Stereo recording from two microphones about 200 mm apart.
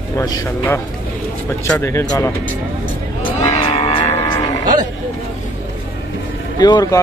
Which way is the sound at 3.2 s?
30° left (ahead or behind).